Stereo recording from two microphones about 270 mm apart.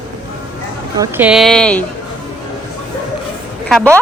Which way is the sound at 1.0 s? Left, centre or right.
Centre.